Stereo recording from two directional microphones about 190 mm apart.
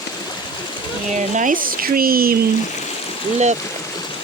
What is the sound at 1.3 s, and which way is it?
Speech, 40° right (ahead or behind).